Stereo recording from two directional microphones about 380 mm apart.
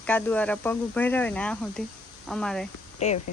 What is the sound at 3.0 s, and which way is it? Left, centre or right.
Speech, centre.